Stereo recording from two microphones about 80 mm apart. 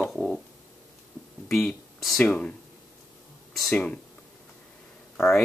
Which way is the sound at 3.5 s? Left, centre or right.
Centre.